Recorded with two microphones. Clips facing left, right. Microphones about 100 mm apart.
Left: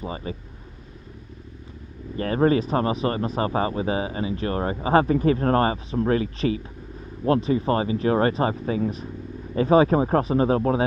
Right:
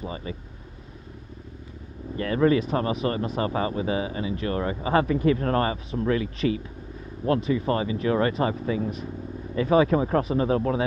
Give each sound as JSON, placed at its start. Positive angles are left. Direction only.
{"t": 0.0, "sound": "speech", "side_deg": 35}
{"t": 2.1, "sound": "speech", "side_deg": 35}